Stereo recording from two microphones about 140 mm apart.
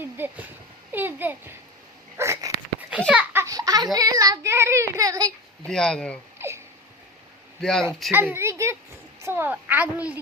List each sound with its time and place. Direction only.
0.0 s a woman's voice: 15° right (ahead or behind)
2.1 s a sound: 20° right (ahead or behind)
3.1 s a child's voice: 10° right (ahead or behind)
3.4 s a sound: 25° right (ahead or behind)
3.9 s child singing: 25° right (ahead or behind)
5.6 s speech: 5° left (ahead or behind)
6.4 s a sound: 15° right (ahead or behind)
7.6 s speech: 5° left (ahead or behind)
8.1 s a woman's voice: 15° right (ahead or behind)